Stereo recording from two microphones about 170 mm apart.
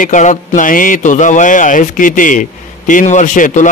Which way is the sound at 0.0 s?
45° left (ahead or behind).